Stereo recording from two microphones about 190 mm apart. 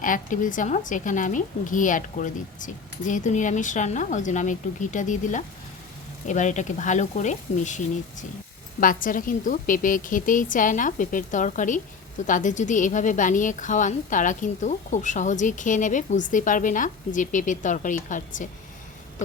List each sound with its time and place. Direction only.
0.0 s a woman's voice: 45° left (ahead or behind)